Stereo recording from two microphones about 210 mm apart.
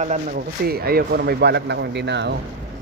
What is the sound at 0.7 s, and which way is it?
Speech, 45° right (ahead or behind).